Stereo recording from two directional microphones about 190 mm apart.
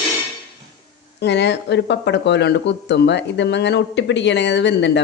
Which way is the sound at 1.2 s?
65° left (ahead or behind).